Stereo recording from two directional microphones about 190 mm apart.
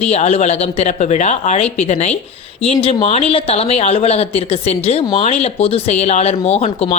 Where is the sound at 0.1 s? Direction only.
35° left (ahead or behind).